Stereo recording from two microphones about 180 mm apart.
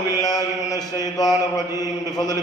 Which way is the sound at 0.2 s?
20° left (ahead or behind).